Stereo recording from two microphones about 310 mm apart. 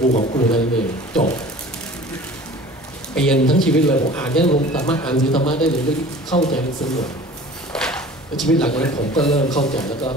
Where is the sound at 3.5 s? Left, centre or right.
Centre.